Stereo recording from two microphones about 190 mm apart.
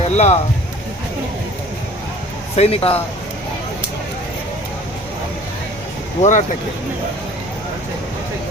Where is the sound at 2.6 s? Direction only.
30° left (ahead or behind).